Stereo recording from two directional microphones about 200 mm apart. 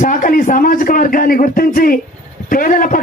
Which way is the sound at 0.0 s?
40° left (ahead or behind).